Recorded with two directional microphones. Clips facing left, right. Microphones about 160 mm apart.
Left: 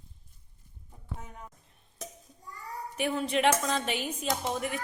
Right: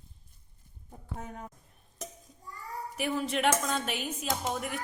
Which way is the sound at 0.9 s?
45° right (ahead or behind).